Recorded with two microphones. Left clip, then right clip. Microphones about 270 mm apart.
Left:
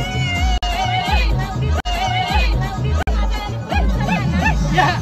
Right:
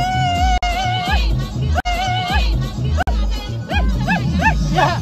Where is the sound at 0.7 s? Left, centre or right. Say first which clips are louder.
Even; centre.